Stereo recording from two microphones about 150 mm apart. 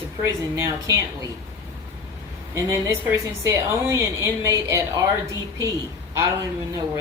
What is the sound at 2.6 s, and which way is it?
A woman's voice, 20° right (ahead or behind).